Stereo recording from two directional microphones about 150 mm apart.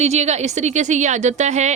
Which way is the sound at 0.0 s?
45° right (ahead or behind).